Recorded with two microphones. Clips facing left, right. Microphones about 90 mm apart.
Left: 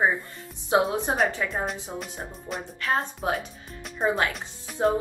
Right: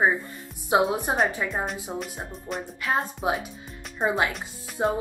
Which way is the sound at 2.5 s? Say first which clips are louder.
Right 2 dB; centre (ahead or behind).